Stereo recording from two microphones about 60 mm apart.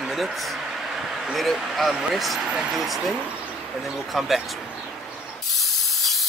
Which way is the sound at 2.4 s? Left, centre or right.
Centre.